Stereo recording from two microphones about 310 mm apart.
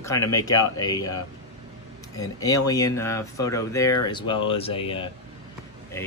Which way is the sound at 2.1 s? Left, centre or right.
Centre.